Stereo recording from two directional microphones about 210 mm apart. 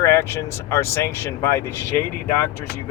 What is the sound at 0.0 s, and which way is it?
Speech, 15° left (ahead or behind).